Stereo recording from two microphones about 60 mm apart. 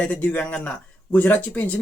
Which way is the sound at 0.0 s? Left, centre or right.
Left.